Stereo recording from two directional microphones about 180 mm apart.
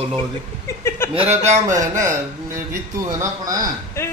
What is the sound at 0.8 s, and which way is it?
Chuckle, 15° left (ahead or behind).